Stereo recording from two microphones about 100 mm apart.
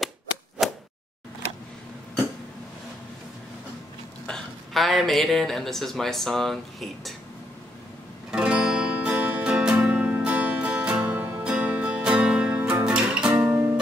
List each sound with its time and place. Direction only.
0.6 s a sound: centre (ahead or behind)
4.3 s speech: centre (ahead or behind)
8.3 s music: 10° right (ahead or behind)